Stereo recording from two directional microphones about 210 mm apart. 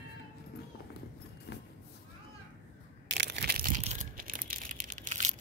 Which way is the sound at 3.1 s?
55° right (ahead or behind).